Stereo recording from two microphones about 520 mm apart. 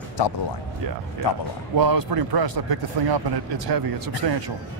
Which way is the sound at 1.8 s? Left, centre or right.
Right.